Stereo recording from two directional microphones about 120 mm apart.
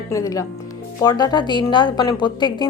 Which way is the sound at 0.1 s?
25° left (ahead or behind).